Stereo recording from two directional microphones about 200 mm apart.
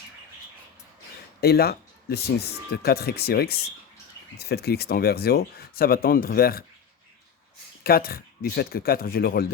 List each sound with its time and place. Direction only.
1.4 s speech: 50° left (ahead or behind)
7.9 s speech: 50° left (ahead or behind)